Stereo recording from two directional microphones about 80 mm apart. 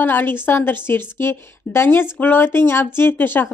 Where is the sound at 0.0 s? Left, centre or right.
Left.